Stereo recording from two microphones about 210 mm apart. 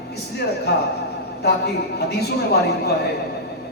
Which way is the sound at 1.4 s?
50° left (ahead or behind).